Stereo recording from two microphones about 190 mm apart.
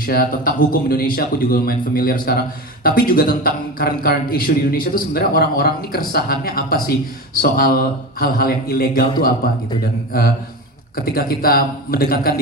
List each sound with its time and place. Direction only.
0.0 s a man's voice: 50° left (ahead or behind)
10.1 s a man's voice: 50° left (ahead or behind)